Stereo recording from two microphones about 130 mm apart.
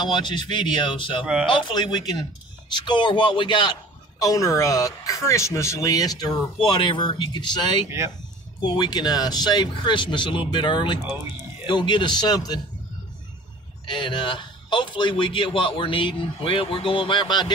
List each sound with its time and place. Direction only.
0.0 s a man's voice: 35° left (ahead or behind)
4.2 s a man's voice: 25° left (ahead or behind)
13.8 s a man's voice: 35° left (ahead or behind)